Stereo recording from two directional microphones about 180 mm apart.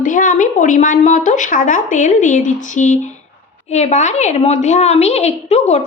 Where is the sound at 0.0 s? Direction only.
45° left (ahead or behind).